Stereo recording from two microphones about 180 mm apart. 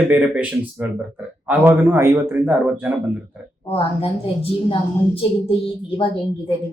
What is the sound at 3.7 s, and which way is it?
A woman's voice, 30° left (ahead or behind).